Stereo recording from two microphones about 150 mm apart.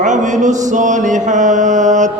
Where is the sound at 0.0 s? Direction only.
55° right (ahead or behind).